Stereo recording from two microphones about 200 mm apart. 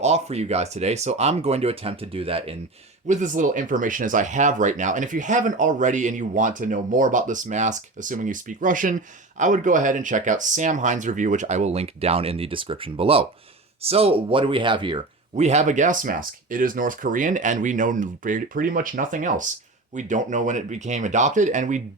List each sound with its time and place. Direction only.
0.0 s speech: 30° right (ahead or behind)
3.1 s speech: 40° right (ahead or behind)